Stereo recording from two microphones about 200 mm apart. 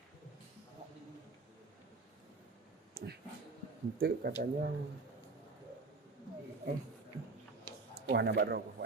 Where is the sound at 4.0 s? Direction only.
50° right (ahead or behind).